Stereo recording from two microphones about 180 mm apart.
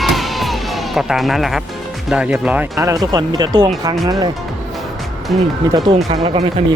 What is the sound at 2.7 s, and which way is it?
Speech, 20° right (ahead or behind).